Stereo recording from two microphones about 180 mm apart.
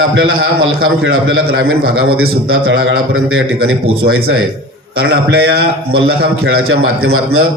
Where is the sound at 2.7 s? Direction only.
90° right; by 6.6 s 60° right (ahead or behind).